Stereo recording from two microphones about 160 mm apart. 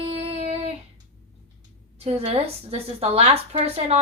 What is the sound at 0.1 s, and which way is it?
Child singing, 40° right (ahead or behind).